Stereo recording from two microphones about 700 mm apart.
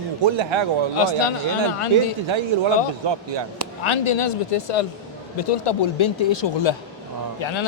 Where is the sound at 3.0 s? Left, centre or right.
Right.